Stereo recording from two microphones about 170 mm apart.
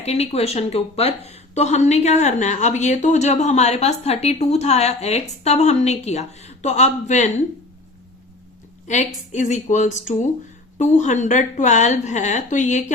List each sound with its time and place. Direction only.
0.0 s a woman's voice: 35° left (ahead or behind)
8.9 s speech: 45° left (ahead or behind)